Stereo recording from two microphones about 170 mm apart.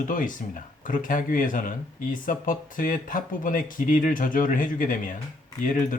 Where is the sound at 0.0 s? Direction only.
50° left (ahead or behind).